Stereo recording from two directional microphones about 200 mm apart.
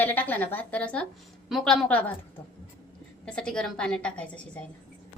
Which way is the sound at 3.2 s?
5° left (ahead or behind).